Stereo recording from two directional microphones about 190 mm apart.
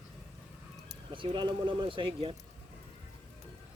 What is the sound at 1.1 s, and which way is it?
Speech, 25° right (ahead or behind).